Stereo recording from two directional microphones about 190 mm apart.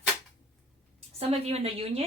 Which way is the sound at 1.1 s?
30° right (ahead or behind).